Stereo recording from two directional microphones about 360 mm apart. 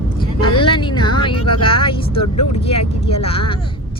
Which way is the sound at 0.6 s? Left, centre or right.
Centre.